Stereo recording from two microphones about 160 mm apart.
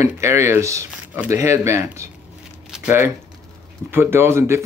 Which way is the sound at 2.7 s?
5° right (ahead or behind).